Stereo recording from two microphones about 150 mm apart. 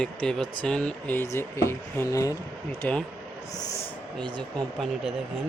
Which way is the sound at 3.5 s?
25° left (ahead or behind).